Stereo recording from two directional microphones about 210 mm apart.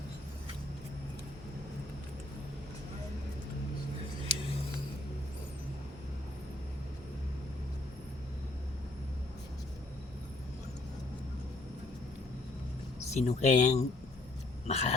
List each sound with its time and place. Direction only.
13.1 s speech: 30° left (ahead or behind)